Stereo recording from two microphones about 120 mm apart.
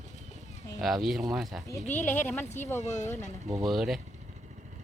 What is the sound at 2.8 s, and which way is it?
Speech, 75° left (ahead or behind).